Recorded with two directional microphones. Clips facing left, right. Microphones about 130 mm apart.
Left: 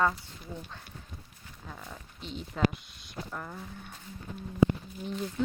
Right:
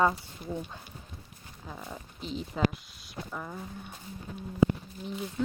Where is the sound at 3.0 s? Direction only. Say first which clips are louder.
Right 1 dB; 5° right (ahead or behind).